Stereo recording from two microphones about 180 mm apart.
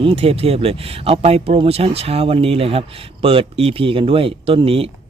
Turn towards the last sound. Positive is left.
turn(degrees=-30)  # may be behind; listen again after turning